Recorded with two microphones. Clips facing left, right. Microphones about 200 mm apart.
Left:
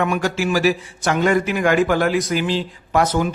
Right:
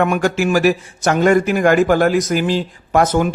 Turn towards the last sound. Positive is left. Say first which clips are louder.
# right 3 dB
turn(degrees=-50)  # may be behind; listen again after turning